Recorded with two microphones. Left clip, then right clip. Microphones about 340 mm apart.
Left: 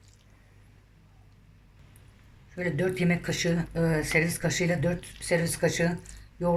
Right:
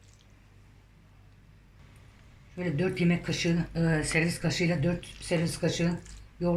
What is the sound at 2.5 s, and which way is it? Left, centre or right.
Speech, centre.